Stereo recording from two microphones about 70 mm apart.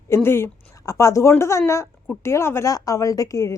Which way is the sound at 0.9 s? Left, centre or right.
Left.